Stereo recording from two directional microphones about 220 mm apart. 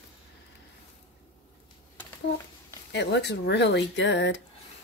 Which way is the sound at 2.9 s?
50° left (ahead or behind).